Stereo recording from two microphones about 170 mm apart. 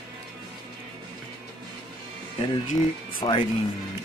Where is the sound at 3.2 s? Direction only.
25° left (ahead or behind).